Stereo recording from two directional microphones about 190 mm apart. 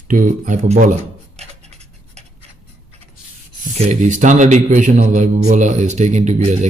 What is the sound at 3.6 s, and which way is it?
A man's voice, 35° right (ahead or behind).